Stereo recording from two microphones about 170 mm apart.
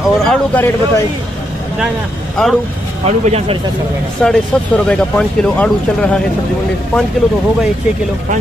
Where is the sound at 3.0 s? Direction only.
40° right (ahead or behind).